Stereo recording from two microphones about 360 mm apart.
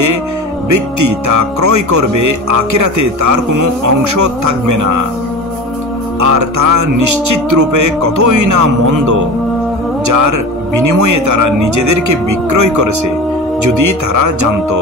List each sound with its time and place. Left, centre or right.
0.7 s speech: right
6.2 s speech: right